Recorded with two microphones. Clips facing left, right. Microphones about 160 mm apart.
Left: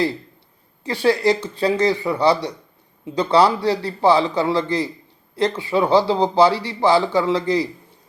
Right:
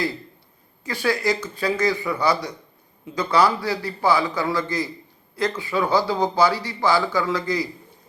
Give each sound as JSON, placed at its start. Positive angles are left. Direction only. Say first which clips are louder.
{"t": 0.9, "sound": "speech", "louder": "left 5 dB", "side_deg": 30}